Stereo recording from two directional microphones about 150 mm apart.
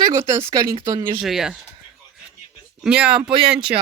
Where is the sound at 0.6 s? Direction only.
30° right (ahead or behind).